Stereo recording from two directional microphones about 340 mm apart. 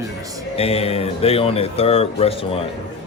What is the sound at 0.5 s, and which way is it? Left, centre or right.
A man's voice, centre.